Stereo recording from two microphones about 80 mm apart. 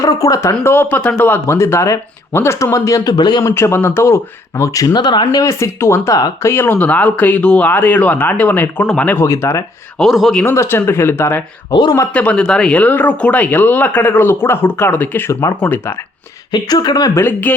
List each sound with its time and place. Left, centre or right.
0.0 s speech: left
0.6 s speech: left
3.4 s speech: left
4.9 s speech: left
5.4 s speech: left
9.2 s speech: left
10.0 s speech: centre
10.4 s speech: left
11.7 s speech: left
12.1 s speech: centre
15.3 s speech: left
16.5 s speech: left
17.2 s speech: left